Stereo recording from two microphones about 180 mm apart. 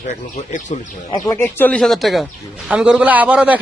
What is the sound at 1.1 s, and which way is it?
A man's voice, 15° left (ahead or behind).